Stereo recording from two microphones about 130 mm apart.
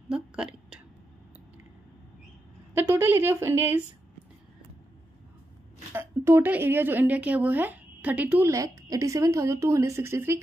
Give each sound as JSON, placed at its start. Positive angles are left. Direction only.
{"t": 0.1, "sound": "a woman's voice", "side_deg": -5}
{"t": 2.7, "sound": "a woman's voice", "side_deg": -20}
{"t": 5.9, "sound": "speech", "side_deg": -15}
{"t": 8.5, "sound": "a woman's voice", "side_deg": -25}